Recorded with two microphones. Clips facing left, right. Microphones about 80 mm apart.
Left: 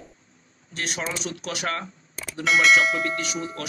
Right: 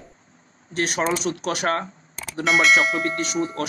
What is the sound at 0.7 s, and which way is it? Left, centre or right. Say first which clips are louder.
Speech: right 7 dB; right.